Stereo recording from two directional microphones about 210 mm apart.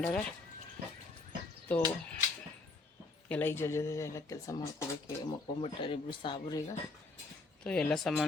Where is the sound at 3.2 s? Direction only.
10° left (ahead or behind).